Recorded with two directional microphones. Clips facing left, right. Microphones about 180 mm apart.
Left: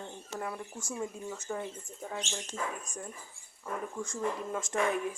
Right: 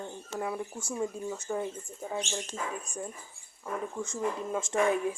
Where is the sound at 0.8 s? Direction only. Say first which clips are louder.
Right 2 dB; 30° right (ahead or behind).